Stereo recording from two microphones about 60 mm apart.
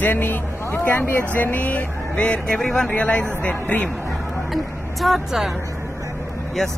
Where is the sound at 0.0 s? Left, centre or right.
Left.